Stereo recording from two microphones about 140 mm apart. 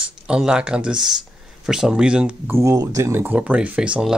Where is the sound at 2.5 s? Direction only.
25° right (ahead or behind); by 4.1 s 5° right (ahead or behind).